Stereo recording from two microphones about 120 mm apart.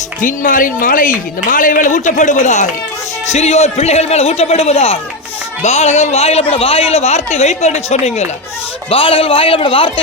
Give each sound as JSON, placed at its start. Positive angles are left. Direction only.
{"t": 0.2, "sound": "a man's voice", "side_deg": 90}
{"t": 3.3, "sound": "a man's voice", "side_deg": 65}
{"t": 5.6, "sound": "a man's voice", "side_deg": 70}
{"t": 8.9, "sound": "a man's voice", "side_deg": 50}